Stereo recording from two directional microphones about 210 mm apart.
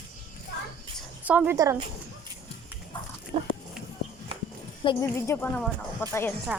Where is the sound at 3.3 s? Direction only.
30° right (ahead or behind).